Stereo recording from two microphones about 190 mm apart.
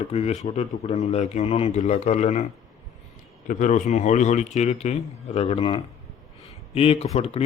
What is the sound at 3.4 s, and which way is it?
A man's voice, 40° left (ahead or behind).